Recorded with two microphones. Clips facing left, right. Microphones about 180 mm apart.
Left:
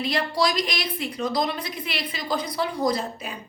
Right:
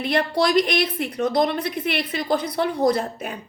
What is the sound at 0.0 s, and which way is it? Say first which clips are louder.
A woman's voice: right 3 dB; 60° right (ahead or behind).